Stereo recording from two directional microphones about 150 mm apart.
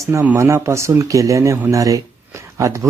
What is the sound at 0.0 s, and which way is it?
Speech, 15° right (ahead or behind).